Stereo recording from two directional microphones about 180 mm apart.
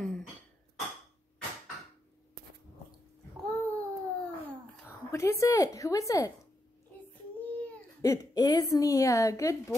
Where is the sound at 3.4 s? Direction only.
Centre (ahead or behind).